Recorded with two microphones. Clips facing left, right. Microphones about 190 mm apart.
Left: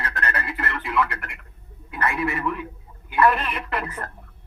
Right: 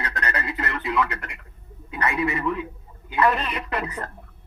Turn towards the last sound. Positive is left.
turn(degrees=-15)  # may be behind; listen again after turning